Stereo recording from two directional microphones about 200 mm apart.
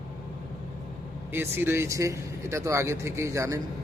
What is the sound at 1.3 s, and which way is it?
Speech, 10° right (ahead or behind).